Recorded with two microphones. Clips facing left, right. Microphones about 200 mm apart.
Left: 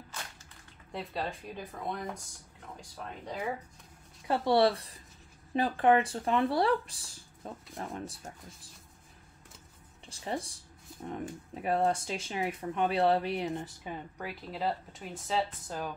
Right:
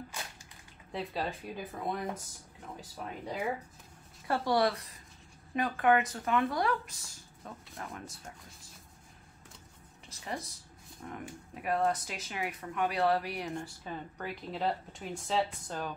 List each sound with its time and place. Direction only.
0.9 s speech: centre (ahead or behind)
4.3 s speech: 25° left (ahead or behind)
10.0 s speech: 30° left (ahead or behind)
14.1 s speech: 5° left (ahead or behind)